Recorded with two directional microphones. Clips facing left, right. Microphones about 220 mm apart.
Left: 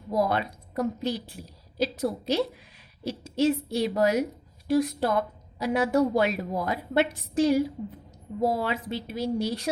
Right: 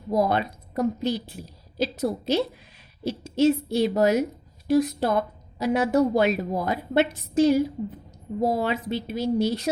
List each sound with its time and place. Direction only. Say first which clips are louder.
0.1 s a woman's voice: right 3 dB; 20° right (ahead or behind)